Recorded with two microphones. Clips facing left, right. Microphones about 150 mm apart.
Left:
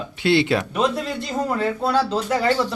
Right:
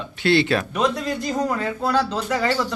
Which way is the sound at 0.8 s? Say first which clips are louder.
Even; centre (ahead or behind).